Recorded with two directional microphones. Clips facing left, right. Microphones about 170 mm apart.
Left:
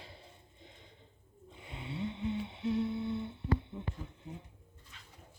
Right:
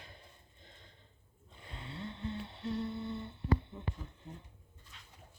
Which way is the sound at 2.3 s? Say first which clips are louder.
Left 5 dB; 5° left (ahead or behind).